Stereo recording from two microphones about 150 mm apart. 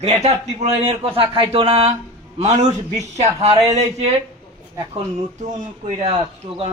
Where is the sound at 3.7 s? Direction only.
45° right (ahead or behind).